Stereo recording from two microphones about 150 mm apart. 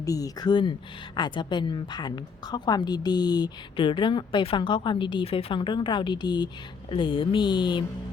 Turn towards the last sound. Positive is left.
turn(degrees=30)  # may be behind; listen again after turning